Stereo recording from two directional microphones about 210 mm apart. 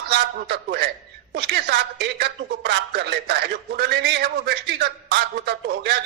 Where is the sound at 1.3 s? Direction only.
50° right (ahead or behind).